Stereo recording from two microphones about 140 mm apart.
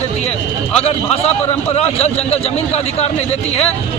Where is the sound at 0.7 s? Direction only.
45° left (ahead or behind).